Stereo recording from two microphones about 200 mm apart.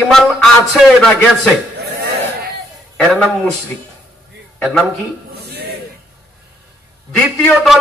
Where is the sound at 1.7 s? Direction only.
55° right (ahead or behind).